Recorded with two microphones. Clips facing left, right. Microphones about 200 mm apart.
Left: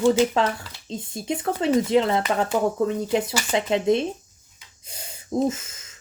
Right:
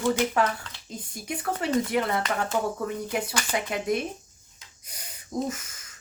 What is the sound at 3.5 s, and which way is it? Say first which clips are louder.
Speech: left 8 dB; 25° left (ahead or behind).